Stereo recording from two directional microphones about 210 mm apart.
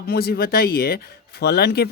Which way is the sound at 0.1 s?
45° left (ahead or behind).